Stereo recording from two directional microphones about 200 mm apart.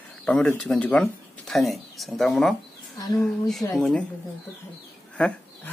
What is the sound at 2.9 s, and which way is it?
Speech, 20° left (ahead or behind).